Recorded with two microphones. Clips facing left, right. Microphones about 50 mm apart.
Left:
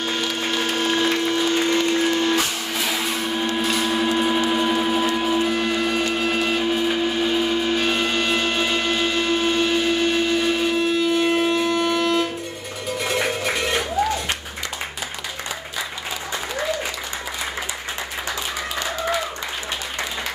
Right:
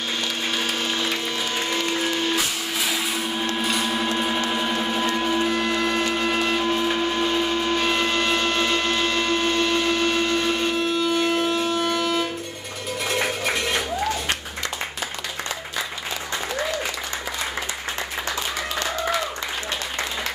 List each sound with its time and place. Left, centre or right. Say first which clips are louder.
0.7 s music: left 5 dB; left
1.7 s music: left 5 dB; centre